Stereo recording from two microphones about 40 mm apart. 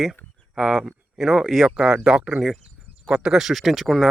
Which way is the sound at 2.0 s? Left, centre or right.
Right.